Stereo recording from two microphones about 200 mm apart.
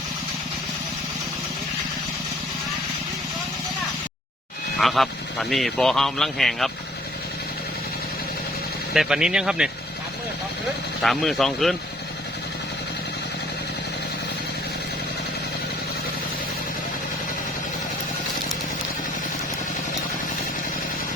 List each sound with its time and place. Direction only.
4.8 s speech: centre (ahead or behind)
8.9 s speech: centre (ahead or behind)
11.0 s speech: centre (ahead or behind)